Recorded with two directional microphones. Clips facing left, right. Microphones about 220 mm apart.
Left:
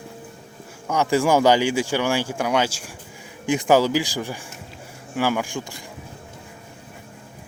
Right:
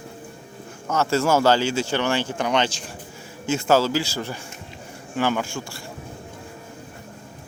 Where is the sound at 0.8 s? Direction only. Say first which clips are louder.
Left 1 dB; 15° left (ahead or behind).